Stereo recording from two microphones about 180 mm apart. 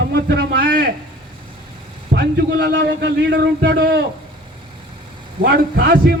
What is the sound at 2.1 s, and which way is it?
A man's voice, 65° right (ahead or behind).